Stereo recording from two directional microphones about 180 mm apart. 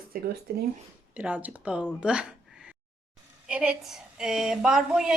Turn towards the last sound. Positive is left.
turn(degrees=-5)  # may be behind; listen again after turning